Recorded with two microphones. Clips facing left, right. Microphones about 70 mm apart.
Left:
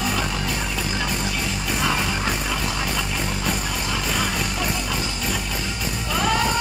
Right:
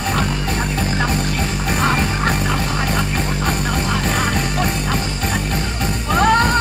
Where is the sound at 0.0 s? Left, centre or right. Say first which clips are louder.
Right 4 dB; right.